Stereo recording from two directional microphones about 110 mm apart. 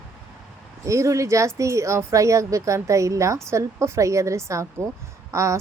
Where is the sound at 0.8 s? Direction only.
30° right (ahead or behind).